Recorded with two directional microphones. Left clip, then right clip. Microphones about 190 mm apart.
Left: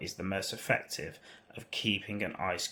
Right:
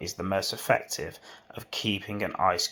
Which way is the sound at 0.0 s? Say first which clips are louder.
Right 7 dB; 15° right (ahead or behind).